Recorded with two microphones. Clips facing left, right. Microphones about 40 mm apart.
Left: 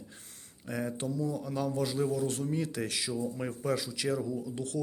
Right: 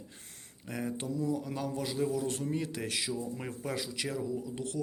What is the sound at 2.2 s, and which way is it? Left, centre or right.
Speech, right.